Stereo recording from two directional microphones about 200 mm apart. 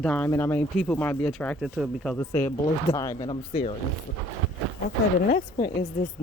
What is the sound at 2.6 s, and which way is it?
Speech, 20° left (ahead or behind).